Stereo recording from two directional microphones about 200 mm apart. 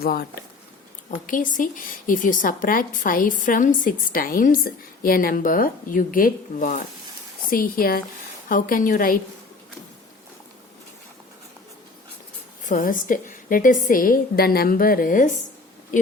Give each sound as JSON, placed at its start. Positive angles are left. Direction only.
{"t": 0.0, "sound": "a woman's voice", "side_deg": 50}
{"t": 1.3, "sound": "a woman's voice", "side_deg": 40}
{"t": 12.6, "sound": "a woman's voice", "side_deg": 40}